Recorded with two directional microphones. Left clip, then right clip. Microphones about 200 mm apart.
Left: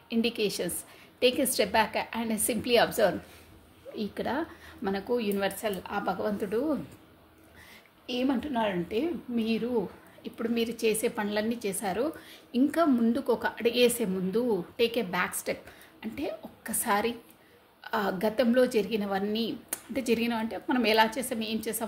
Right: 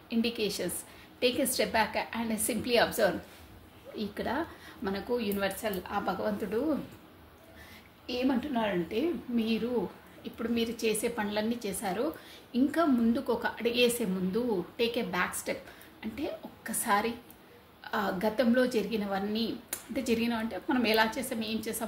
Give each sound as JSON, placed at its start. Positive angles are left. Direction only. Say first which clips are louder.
{"t": 0.1, "sound": "a woman's voice", "louder": "left 3 dB", "side_deg": 50}
{"t": 8.1, "sound": "a woman's voice", "louder": "left 1 dB", "side_deg": 45}